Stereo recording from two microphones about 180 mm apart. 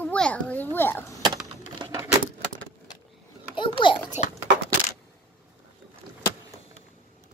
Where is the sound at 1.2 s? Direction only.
20° right (ahead or behind).